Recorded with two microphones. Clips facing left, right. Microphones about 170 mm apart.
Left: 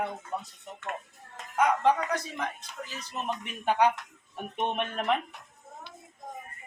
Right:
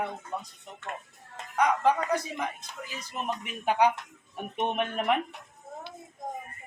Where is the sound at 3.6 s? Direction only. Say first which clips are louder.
Even; 10° right (ahead or behind).